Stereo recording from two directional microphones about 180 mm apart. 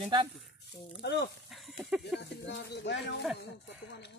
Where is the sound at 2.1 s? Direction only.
70° left (ahead or behind).